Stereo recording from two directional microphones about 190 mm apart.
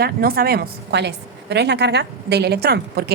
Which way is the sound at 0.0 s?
55° right (ahead or behind).